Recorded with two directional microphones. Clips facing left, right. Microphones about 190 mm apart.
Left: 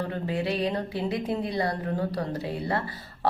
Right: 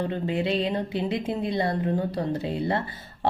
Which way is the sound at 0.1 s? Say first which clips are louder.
Right 3 dB; 20° right (ahead or behind).